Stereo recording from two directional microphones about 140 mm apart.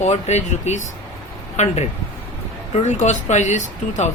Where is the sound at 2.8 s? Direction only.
55° left (ahead or behind).